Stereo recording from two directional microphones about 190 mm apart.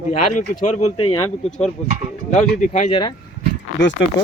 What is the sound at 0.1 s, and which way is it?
Speech, 40° left (ahead or behind).